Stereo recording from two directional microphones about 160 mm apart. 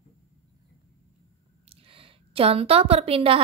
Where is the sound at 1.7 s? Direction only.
35° right (ahead or behind).